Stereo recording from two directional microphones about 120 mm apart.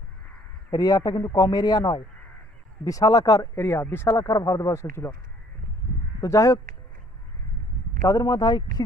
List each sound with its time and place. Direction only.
0.7 s a man's voice: 30° left (ahead or behind)
4.1 s speech: 30° left (ahead or behind)
6.2 s speech: 30° left (ahead or behind)
8.1 s a man's voice: 30° left (ahead or behind)